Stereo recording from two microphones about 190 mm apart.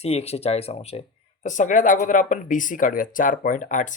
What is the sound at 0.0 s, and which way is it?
Speech, 35° left (ahead or behind).